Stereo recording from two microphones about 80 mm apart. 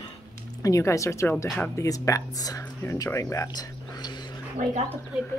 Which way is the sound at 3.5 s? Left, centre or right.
Left.